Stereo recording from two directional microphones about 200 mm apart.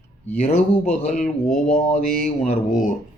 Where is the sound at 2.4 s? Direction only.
40° left (ahead or behind).